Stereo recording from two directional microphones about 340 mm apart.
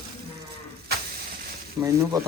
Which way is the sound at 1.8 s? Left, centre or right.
Centre.